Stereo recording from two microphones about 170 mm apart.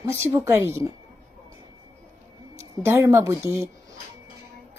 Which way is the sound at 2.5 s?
15° right (ahead or behind).